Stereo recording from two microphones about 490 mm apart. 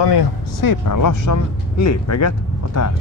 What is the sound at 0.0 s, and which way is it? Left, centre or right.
Speech, left.